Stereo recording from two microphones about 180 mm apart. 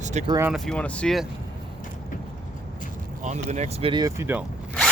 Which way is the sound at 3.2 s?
40° right (ahead or behind).